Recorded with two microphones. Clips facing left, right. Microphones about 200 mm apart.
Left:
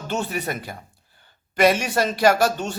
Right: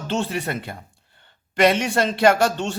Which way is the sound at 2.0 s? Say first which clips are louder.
Right 1 dB; 25° right (ahead or behind).